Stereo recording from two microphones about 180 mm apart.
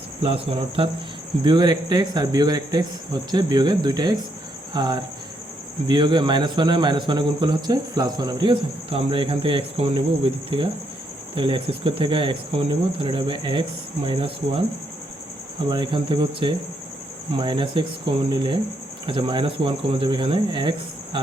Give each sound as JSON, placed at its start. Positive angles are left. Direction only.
{"t": 0.2, "sound": "a man's voice", "side_deg": -30}
{"t": 4.7, "sound": "cricket", "side_deg": -25}
{"t": 5.9, "sound": "a man's voice", "side_deg": -25}
{"t": 11.3, "sound": "a man's voice", "side_deg": -30}
{"t": 15.7, "sound": "a man's voice", "side_deg": -25}